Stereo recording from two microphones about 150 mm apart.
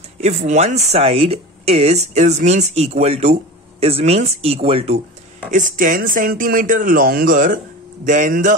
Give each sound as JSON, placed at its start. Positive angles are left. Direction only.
{"t": 0.2, "sound": "speech", "side_deg": -50}
{"t": 5.5, "sound": "a man's voice", "side_deg": -65}